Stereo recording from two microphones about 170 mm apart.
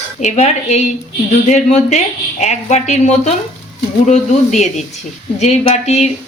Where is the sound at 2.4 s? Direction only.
40° left (ahead or behind).